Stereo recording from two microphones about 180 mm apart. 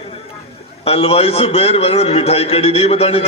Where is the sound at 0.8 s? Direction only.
35° left (ahead or behind).